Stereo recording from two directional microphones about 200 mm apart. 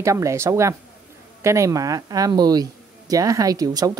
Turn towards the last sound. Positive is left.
turn(degrees=-20)  # may be behind; listen again after turning